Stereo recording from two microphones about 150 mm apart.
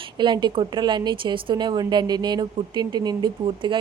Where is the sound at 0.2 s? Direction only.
30° right (ahead or behind).